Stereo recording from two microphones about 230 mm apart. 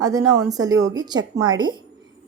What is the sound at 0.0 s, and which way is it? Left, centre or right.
A woman's voice, centre.